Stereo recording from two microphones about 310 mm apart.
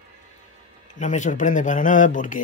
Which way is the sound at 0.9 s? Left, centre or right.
Left.